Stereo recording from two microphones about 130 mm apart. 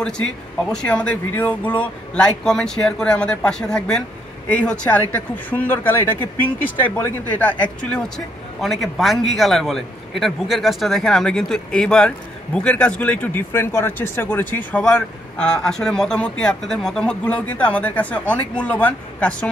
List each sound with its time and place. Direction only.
0.7 s a man's voice: 5° left (ahead or behind)